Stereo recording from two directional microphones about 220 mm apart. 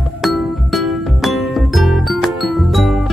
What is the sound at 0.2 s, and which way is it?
Music, centre (ahead or behind).